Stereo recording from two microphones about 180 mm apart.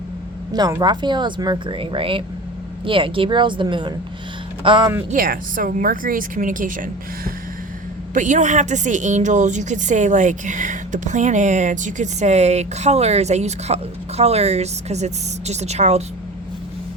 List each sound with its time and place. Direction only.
0.5 s speech: 20° right (ahead or behind)
5.1 s a woman's voice: 55° right (ahead or behind)